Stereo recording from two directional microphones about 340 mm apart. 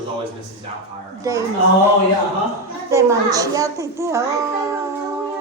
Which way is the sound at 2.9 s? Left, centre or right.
Centre.